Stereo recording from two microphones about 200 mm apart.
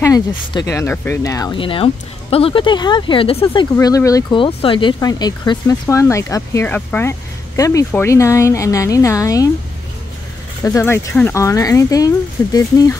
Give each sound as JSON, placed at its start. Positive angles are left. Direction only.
{"t": 0.0, "sound": "speech", "side_deg": 20}
{"t": 3.7, "sound": "speech", "side_deg": 15}
{"t": 10.6, "sound": "speech", "side_deg": 15}